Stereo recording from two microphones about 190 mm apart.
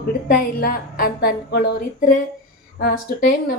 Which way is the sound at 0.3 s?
50° left (ahead or behind).